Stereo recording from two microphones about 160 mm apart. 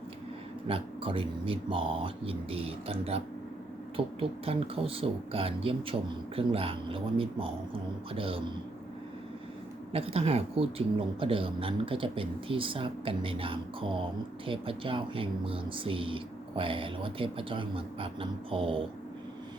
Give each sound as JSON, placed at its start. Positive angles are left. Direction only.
{"t": 0.7, "sound": "speech", "side_deg": -35}
{"t": 9.9, "sound": "speech", "side_deg": -40}